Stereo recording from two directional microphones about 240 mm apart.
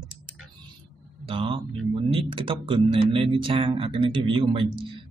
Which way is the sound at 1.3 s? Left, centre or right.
Right.